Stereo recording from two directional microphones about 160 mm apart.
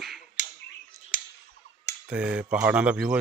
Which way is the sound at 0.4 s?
50° left (ahead or behind).